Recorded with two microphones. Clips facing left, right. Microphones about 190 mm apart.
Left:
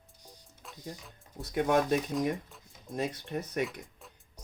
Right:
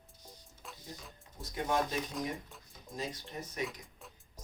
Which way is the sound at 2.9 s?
60° left (ahead or behind).